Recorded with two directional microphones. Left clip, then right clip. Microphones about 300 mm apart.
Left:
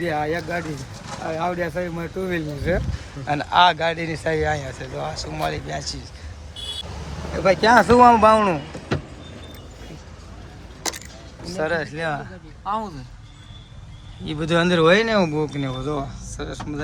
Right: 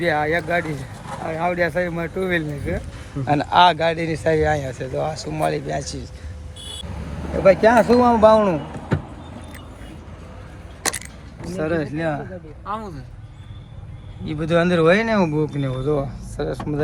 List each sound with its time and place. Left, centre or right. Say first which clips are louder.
0.0 s speech: right 4 dB; centre
0.6 s a sound: right 3 dB; right
1.3 s speech: right 4 dB; centre
7.4 s speech: right 1 dB; centre
11.5 s speech: even; centre
14.3 s speech: right 1 dB; centre